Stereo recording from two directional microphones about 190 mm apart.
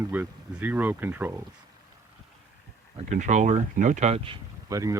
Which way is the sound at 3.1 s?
40° right (ahead or behind).